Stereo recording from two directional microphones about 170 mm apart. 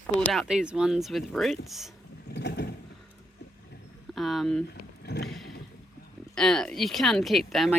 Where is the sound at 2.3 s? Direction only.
75° left (ahead or behind).